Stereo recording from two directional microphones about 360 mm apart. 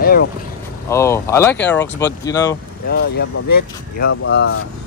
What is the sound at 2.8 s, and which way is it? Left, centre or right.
Speech, left.